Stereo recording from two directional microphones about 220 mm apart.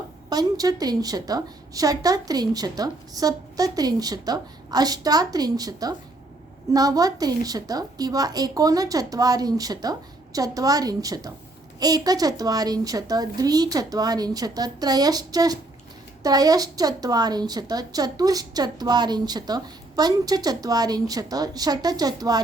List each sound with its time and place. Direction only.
0.3 s a woman's voice: 15° right (ahead or behind)